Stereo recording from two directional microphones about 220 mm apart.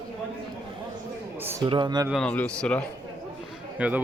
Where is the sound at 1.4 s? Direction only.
10° right (ahead or behind).